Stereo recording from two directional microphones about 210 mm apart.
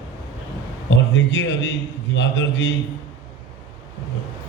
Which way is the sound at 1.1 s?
55° left (ahead or behind).